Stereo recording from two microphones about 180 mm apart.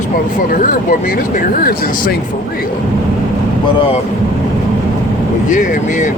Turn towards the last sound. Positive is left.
turn(degrees=45)  # may be behind; listen again after turning